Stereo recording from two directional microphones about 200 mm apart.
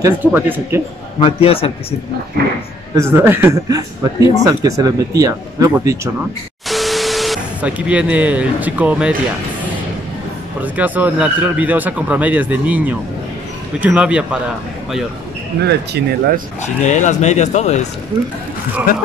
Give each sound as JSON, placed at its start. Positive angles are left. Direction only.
{"t": 0.0, "sound": "speech", "side_deg": -10}
{"t": 1.2, "sound": "a man's voice", "side_deg": 30}
{"t": 3.0, "sound": "speech", "side_deg": -10}
{"t": 6.7, "sound": "speech", "side_deg": 0}
{"t": 10.6, "sound": "speech", "side_deg": -10}
{"t": 15.6, "sound": "speech", "side_deg": -55}
{"t": 16.6, "sound": "speech", "side_deg": 35}